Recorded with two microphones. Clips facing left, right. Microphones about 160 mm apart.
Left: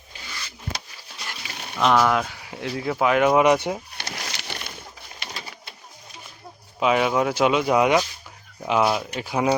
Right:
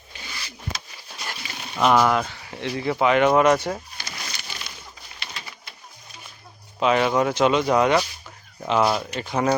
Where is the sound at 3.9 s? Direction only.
80° left; by 4.8 s 60° left (ahead or behind).